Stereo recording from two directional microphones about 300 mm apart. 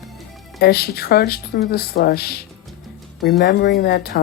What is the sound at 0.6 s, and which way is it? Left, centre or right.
Speech, left.